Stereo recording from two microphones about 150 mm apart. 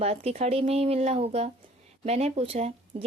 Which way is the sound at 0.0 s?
45° right (ahead or behind).